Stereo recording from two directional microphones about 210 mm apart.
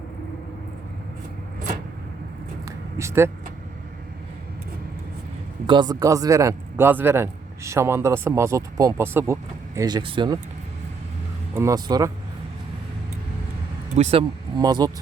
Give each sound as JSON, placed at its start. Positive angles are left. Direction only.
{"t": 2.6, "sound": "a sound", "side_deg": -15}
{"t": 5.6, "sound": "a man's voice", "side_deg": -20}
{"t": 11.5, "sound": "a man's voice", "side_deg": -15}
{"t": 13.9, "sound": "speech", "side_deg": -30}